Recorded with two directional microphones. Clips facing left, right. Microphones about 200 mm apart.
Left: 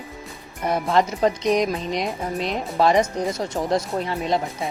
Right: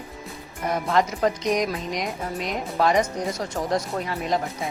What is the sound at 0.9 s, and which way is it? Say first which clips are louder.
A woman's voice: left 2 dB; 30° left (ahead or behind).